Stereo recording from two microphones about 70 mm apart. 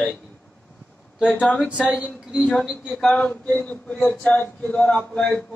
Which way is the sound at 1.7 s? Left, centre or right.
Centre.